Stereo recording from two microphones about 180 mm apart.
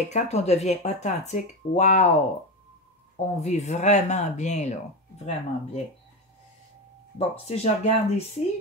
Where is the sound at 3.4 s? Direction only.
40° left (ahead or behind).